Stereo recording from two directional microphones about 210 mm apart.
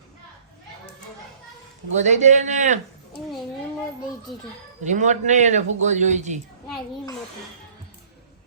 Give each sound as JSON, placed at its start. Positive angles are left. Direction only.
{"t": 2.0, "sound": "speech", "side_deg": -35}
{"t": 4.8, "sound": "speech", "side_deg": -35}